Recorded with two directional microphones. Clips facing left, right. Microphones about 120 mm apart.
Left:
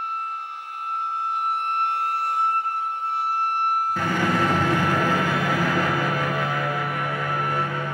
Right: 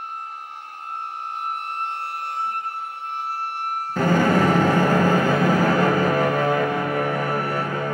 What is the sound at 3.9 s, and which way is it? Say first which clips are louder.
Music: right 5 dB; 40° right (ahead or behind).